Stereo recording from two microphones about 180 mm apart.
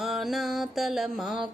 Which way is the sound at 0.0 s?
Centre (ahead or behind).